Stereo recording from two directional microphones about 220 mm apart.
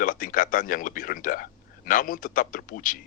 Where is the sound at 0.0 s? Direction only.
40° left (ahead or behind).